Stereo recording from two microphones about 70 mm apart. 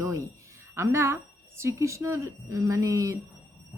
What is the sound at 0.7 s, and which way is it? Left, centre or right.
A woman's voice, right.